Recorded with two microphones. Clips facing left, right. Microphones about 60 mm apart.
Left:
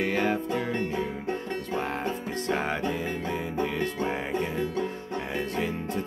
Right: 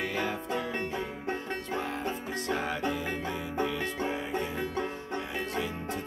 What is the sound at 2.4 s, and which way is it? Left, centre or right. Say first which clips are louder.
Music: left 3 dB; left.